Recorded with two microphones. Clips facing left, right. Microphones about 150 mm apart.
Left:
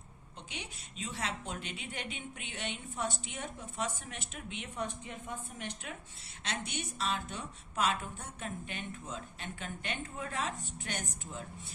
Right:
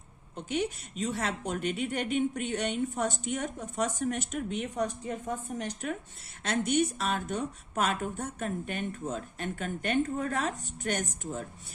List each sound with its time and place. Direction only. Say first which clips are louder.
0.3 s a woman's voice: right 15 dB; 45° right (ahead or behind)